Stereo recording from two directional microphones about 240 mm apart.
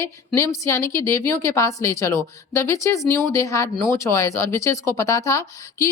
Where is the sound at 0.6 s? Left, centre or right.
Centre.